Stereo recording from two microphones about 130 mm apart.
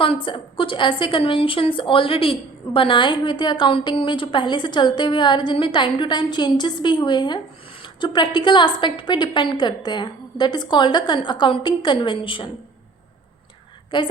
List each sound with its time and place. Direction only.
0.0 s a woman's voice: 40° left (ahead or behind)
13.9 s a woman's voice: 35° left (ahead or behind)